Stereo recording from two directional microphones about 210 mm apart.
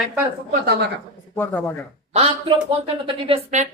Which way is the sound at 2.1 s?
30° right (ahead or behind).